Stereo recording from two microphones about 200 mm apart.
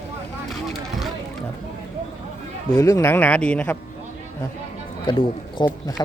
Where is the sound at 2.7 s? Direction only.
15° left (ahead or behind).